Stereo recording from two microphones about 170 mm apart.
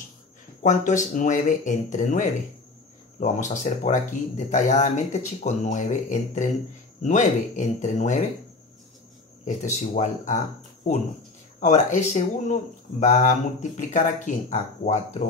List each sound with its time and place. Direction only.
0.6 s speech: 45° left (ahead or behind)
9.4 s speech: 45° left (ahead or behind)